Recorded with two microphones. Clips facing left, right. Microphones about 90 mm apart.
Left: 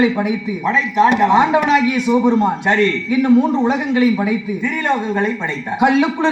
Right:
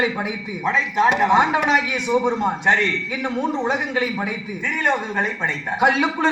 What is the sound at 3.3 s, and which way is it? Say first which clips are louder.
Speech: left 9 dB; 10° left (ahead or behind).